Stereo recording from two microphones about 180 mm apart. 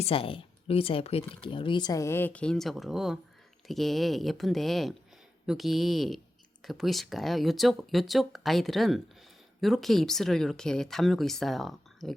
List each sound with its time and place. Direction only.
0.0 s speech: 30° left (ahead or behind); by 12.1 s centre (ahead or behind)